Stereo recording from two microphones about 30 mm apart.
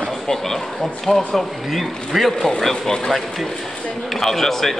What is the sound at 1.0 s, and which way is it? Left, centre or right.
A man's voice, centre.